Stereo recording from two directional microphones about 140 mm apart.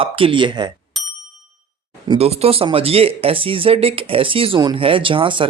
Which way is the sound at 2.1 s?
45° right (ahead or behind).